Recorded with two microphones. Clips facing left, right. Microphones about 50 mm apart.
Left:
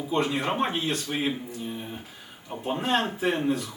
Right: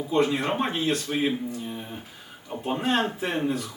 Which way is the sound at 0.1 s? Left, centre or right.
Centre.